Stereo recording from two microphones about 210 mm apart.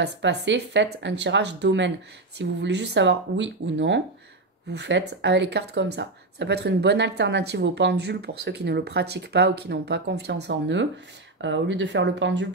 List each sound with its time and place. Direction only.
0.0 s speech: 55° right (ahead or behind)